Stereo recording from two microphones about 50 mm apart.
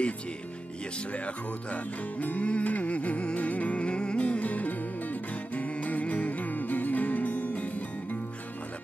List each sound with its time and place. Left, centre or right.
1.1 s music: left